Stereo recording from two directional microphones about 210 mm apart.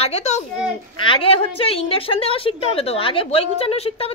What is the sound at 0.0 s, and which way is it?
A child's voice, 30° left (ahead or behind).